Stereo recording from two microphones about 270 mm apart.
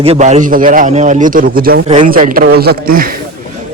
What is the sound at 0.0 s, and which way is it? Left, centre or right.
A man's voice, right.